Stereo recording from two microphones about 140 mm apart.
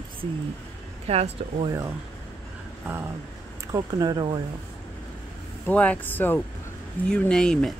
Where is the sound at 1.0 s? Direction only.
50° right (ahead or behind).